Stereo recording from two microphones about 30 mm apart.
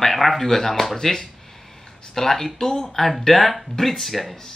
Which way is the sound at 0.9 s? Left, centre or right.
Centre.